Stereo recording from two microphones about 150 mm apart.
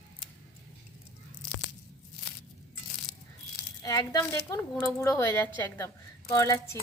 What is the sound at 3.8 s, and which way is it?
Speech, 25° left (ahead or behind).